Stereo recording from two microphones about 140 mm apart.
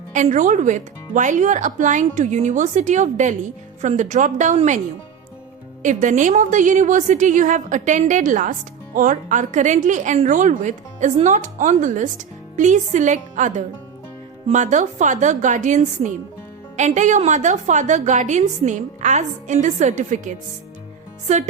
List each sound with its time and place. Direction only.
0.1 s a woman's voice: 60° right (ahead or behind)
5.8 s a woman's voice: 65° right (ahead or behind)